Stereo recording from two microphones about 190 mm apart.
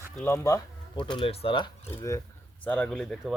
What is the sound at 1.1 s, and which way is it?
Speech, 30° left (ahead or behind).